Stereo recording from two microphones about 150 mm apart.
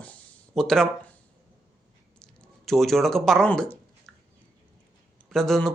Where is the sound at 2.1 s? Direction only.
5° left (ahead or behind).